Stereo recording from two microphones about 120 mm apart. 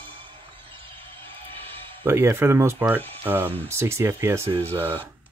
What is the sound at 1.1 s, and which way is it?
Music, 15° left (ahead or behind).